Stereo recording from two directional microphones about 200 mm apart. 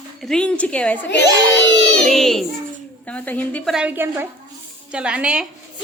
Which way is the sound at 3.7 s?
10° right (ahead or behind).